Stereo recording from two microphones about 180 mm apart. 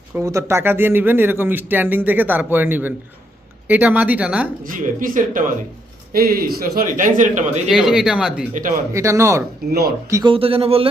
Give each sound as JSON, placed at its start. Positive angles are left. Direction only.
{"t": 0.2, "sound": "speech", "side_deg": -15}
{"t": 4.6, "sound": "a man's voice", "side_deg": -50}
{"t": 7.7, "sound": "speech", "side_deg": -5}
{"t": 8.9, "sound": "speech", "side_deg": -15}
{"t": 10.3, "sound": "speech", "side_deg": -30}